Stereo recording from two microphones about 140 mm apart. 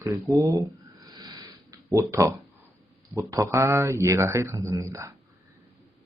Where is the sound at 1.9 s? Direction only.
20° right (ahead or behind).